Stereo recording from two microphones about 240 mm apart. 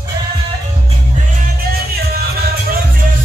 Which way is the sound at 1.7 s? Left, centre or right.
Right.